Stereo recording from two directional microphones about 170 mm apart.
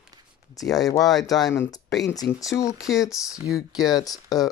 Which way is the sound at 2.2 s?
75° left (ahead or behind).